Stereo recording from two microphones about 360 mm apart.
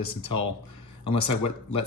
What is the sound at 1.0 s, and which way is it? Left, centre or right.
Speech, left.